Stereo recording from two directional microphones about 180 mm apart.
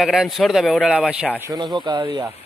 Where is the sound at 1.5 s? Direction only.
25° right (ahead or behind).